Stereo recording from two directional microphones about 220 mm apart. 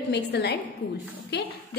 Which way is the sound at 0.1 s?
50° left (ahead or behind).